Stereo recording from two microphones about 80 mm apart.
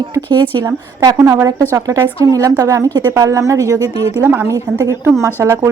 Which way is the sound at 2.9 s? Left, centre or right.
Right.